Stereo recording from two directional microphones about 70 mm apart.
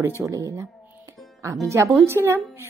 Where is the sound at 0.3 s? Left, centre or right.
Right.